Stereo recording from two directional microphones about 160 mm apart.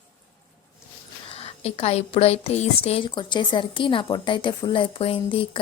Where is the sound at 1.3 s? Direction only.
35° left (ahead or behind).